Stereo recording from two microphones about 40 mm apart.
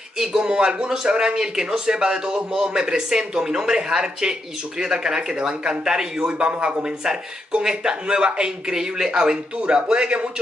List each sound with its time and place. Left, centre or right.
0.4 s a man's voice: right